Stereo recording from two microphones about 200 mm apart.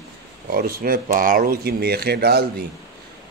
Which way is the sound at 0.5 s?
50° right (ahead or behind).